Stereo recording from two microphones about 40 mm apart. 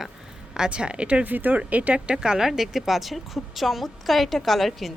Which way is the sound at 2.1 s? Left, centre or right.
Centre.